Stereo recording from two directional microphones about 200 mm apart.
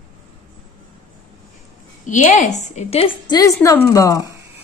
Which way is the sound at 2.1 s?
35° left (ahead or behind).